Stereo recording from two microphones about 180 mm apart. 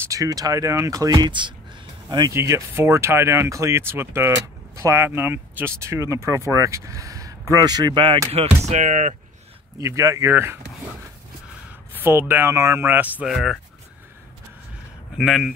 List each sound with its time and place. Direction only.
0.1 s speech: 20° right (ahead or behind); by 9.1 s 40° right (ahead or behind)
9.8 s speech: 15° right (ahead or behind)
11.9 s speech: 10° right (ahead or behind)
15.1 s speech: centre (ahead or behind)